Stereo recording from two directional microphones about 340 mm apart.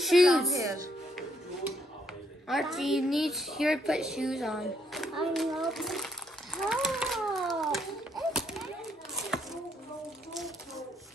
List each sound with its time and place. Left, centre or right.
0.0 s music: centre
2.4 s a woman's voice: centre
6.7 s a sound: centre